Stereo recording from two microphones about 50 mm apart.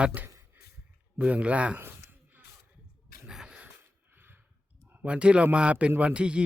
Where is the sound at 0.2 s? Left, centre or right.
Right.